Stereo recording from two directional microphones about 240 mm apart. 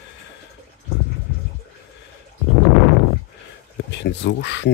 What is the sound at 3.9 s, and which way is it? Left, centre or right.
Speech, left.